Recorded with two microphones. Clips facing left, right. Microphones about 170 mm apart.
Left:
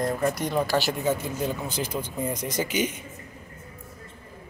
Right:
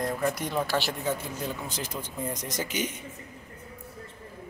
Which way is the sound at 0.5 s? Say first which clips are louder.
Left 4 dB; 5° left (ahead or behind).